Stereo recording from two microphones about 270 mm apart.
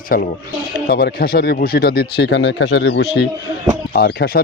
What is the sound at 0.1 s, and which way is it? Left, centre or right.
Speech, left.